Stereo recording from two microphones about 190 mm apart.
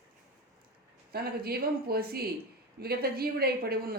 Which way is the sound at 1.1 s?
55° right (ahead or behind).